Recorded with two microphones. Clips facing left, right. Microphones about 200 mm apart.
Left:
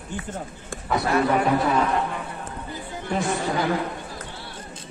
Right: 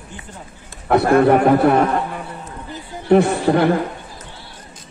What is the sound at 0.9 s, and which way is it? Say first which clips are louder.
A man's voice: right 9 dB; 60° right (ahead or behind).